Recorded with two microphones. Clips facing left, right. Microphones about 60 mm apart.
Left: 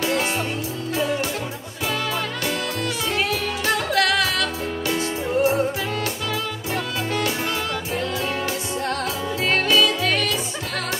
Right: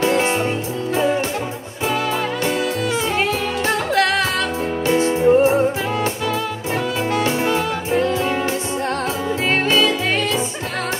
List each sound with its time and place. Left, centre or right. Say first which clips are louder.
0.0 s music: right 5 dB; right
3.2 s music: right 4 dB; right
7.2 s music: right 6 dB; right
9.5 s music: right 1 dB; right